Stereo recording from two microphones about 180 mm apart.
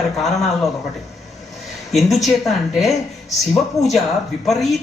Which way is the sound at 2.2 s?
Centre (ahead or behind).